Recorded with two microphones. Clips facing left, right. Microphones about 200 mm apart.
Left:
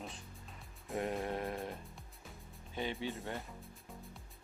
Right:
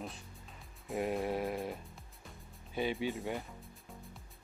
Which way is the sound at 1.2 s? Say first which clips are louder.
Right 3 dB; 10° right (ahead or behind).